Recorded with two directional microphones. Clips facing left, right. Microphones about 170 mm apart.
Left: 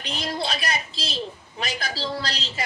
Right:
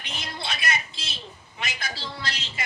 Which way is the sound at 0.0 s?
35° left (ahead or behind).